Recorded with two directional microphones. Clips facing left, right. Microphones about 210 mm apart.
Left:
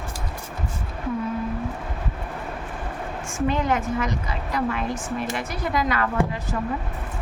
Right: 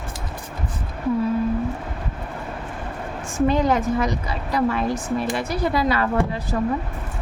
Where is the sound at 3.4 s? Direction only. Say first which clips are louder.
Right 4 dB; 35° right (ahead or behind).